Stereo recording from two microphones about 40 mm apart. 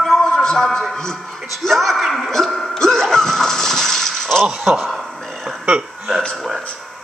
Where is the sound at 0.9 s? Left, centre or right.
Centre.